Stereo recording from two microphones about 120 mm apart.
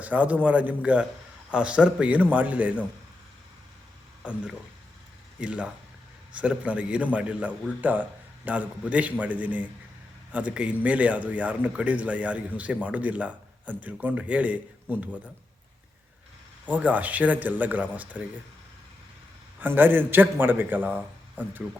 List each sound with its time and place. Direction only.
0.0 s speech: 10° right (ahead or behind)
4.2 s speech: 10° right (ahead or behind)
16.6 s speech: 10° right (ahead or behind)
19.5 s speech: 15° right (ahead or behind)